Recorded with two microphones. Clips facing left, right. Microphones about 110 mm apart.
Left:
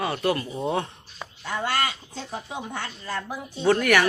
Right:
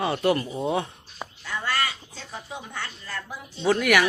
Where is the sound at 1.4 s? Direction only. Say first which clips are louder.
Left 2 dB; 50° left (ahead or behind).